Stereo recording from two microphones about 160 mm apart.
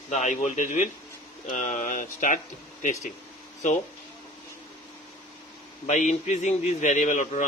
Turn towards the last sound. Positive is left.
turn(degrees=50)  # may be behind; listen again after turning